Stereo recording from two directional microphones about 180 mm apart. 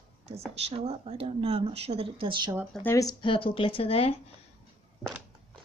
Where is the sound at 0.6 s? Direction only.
35° right (ahead or behind).